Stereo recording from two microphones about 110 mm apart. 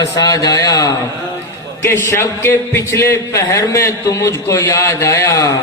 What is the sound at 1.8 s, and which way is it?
A man's voice, 20° left (ahead or behind).